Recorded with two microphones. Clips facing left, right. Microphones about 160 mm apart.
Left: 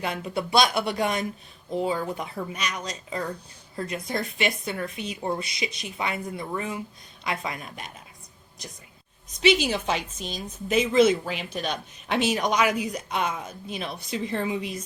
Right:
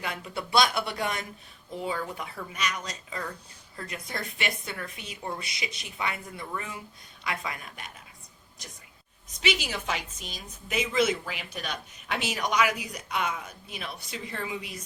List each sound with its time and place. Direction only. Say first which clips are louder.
0.0 s a woman's voice: left 6 dB; 25° left (ahead or behind)
9.4 s a woman's voice: left 8 dB; 25° left (ahead or behind)